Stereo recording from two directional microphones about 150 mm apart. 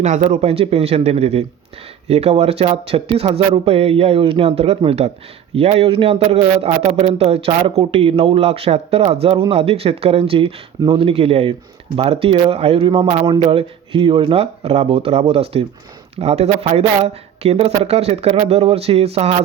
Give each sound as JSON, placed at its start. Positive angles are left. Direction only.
{"t": 0.0, "sound": "a man's voice", "side_deg": -50}